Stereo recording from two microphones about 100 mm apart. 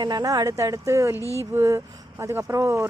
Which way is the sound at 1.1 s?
30° left (ahead or behind).